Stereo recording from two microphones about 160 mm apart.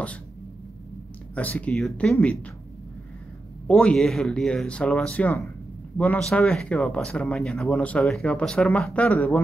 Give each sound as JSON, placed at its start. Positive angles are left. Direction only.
{"t": 1.3, "sound": "speech", "side_deg": 10}
{"t": 3.6, "sound": "speech", "side_deg": 5}